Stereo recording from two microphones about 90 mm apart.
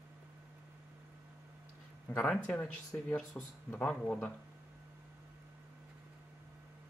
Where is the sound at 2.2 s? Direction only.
15° left (ahead or behind).